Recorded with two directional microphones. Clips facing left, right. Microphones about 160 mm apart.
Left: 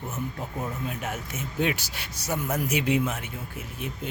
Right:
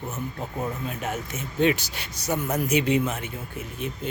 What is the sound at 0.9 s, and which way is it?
Speech, 5° left (ahead or behind).